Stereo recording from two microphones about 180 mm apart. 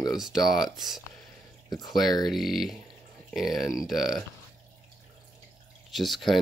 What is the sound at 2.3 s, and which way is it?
Speech, centre (ahead or behind).